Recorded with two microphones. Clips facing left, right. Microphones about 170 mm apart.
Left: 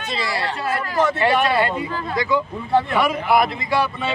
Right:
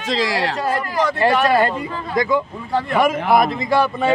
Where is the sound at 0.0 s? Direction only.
90° right.